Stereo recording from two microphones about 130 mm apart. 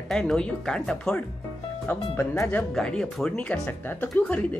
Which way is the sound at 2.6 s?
5° left (ahead or behind).